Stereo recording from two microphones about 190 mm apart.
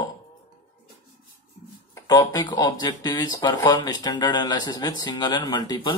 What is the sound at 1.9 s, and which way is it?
Speech, 15° left (ahead or behind).